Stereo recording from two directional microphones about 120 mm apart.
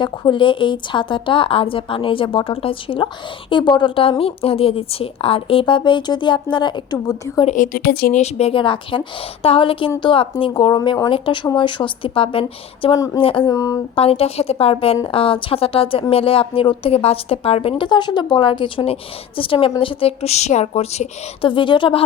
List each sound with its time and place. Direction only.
0.0 s a woman's voice: 40° left (ahead or behind)
7.4 s speech: 90° left
8.1 s a woman's voice: 65° left (ahead or behind); by 13.5 s 45° left (ahead or behind)
13.5 s speech: 30° left (ahead or behind)
13.9 s a woman's voice: 55° left (ahead or behind)
21.4 s a woman's voice: 45° left (ahead or behind)